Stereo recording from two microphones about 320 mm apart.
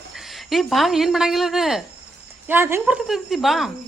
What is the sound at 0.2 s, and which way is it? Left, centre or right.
A woman's voice, centre.